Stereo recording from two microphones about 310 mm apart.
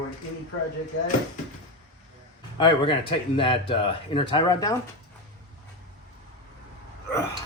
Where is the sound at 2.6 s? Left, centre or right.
Centre.